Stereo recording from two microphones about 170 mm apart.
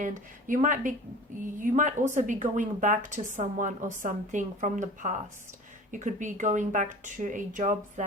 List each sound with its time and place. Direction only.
0.0 s a woman's voice: 50° right (ahead or behind)